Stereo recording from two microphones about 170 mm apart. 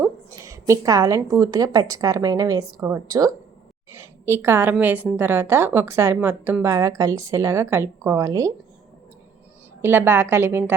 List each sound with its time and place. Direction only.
0.0 s a woman's voice: 20° right (ahead or behind)
9.8 s a woman's voice: 10° right (ahead or behind)